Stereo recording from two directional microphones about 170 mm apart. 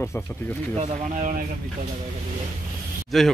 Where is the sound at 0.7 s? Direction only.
40° right (ahead or behind).